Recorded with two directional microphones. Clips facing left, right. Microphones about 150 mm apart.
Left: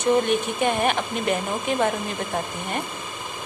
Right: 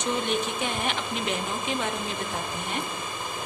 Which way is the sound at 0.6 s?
55° left (ahead or behind).